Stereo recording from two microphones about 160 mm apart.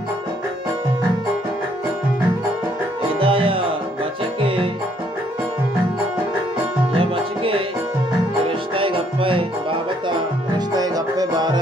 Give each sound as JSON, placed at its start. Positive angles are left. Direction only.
{"t": 3.2, "sound": "music", "side_deg": -35}
{"t": 7.0, "sound": "music", "side_deg": -35}